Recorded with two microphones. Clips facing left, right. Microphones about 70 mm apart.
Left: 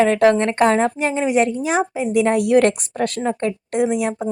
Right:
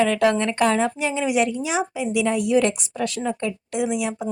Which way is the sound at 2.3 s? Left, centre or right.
Left.